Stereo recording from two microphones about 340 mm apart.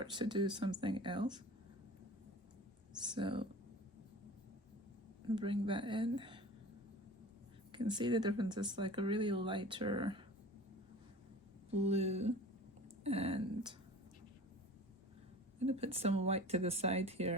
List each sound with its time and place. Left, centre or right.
0.0 s speech: centre
3.0 s speech: centre
5.3 s speech: centre
7.7 s speech: centre
11.7 s speech: centre
15.5 s speech: centre